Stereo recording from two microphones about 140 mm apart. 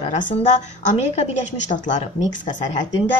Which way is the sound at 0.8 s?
60° left (ahead or behind).